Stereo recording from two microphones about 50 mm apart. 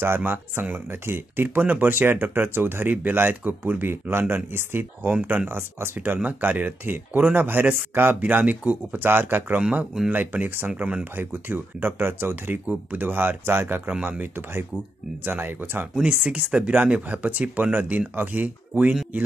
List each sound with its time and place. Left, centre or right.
0.0 s speech: right
3.9 s speech: right
6.1 s speech: right
10.8 s speech: right
11.1 s speech: right
12.6 s speech: right
16.0 s speech: right